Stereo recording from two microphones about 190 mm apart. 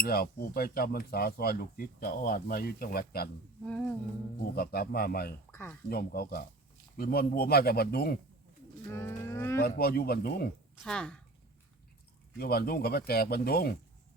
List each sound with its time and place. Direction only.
0.0 s speech: 55° left (ahead or behind)
3.6 s humming: 5° left (ahead or behind)
4.5 s speech: 55° left (ahead or behind)
5.5 s speech: 10° left (ahead or behind)
5.9 s speech: 55° left (ahead or behind)
8.9 s cattle: 15° left (ahead or behind)
9.6 s speech: 55° left (ahead or behind)
10.8 s humming: 5° left (ahead or behind)
12.4 s speech: 55° left (ahead or behind)